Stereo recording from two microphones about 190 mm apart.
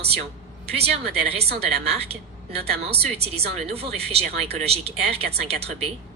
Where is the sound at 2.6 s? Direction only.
30° right (ahead or behind).